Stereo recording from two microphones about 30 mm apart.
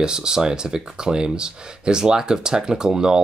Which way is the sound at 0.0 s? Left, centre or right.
Right.